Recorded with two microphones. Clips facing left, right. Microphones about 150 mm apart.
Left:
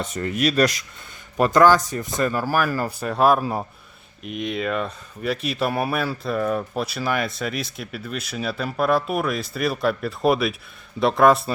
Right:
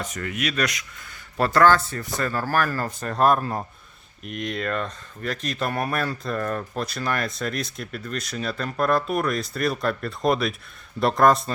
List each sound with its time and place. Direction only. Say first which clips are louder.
0.0 s speech: left 6 dB; 30° left (ahead or behind)
1.4 s speech: left 2 dB; 15° left (ahead or behind)